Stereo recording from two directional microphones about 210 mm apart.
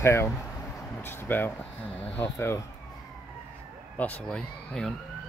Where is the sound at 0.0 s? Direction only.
10° left (ahead or behind).